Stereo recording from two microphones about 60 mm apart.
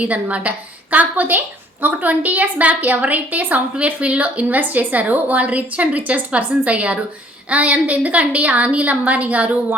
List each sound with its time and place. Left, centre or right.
0.0 s a woman's voice: right